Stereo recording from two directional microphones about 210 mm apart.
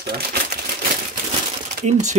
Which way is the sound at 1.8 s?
35° right (ahead or behind).